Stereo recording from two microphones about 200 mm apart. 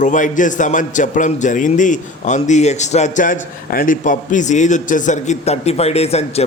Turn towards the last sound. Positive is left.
turn(degrees=30)  # may be behind; listen again after turning